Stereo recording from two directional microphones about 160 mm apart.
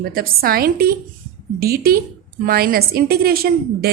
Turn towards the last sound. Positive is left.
turn(degrees=-75)  # may be behind; listen again after turning